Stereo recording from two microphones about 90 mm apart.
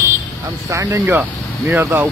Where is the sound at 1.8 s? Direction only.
25° right (ahead or behind).